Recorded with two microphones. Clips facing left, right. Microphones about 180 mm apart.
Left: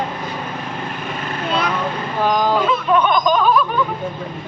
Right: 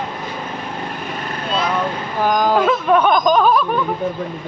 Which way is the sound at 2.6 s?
50° right (ahead or behind).